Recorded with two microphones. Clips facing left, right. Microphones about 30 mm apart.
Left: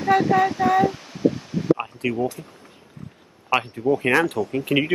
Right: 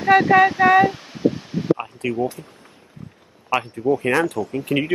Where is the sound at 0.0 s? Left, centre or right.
Right.